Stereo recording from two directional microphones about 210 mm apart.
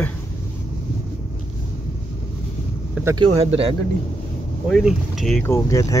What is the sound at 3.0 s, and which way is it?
Speech, 15° right (ahead or behind).